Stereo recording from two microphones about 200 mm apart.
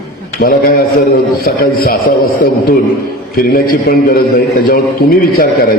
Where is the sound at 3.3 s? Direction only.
50° left (ahead or behind).